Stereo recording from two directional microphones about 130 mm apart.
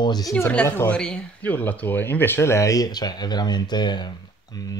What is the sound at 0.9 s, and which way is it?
Speech, 5° left (ahead or behind).